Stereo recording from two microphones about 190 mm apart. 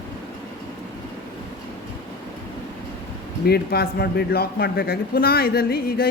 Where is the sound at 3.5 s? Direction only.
55° left (ahead or behind).